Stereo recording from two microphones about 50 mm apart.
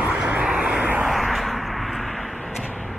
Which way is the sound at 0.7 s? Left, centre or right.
Right.